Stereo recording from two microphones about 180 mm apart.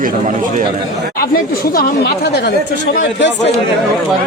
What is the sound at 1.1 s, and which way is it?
Speech, 55° left (ahead or behind).